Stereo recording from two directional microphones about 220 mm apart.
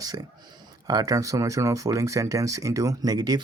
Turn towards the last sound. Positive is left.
turn(degrees=-20)  # may be behind; listen again after turning